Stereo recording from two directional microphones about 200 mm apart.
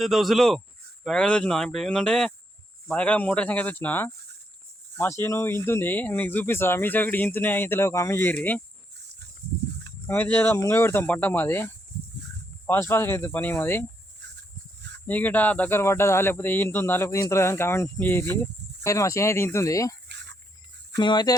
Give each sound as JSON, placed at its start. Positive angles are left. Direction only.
{"t": 0.0, "sound": "speech", "side_deg": 0}
{"t": 10.1, "sound": "speech", "side_deg": 10}
{"t": 14.2, "sound": "a sound", "side_deg": -60}
{"t": 15.0, "sound": "speech", "side_deg": 10}
{"t": 20.1, "sound": "a sound", "side_deg": -60}
{"t": 20.9, "sound": "speech", "side_deg": 20}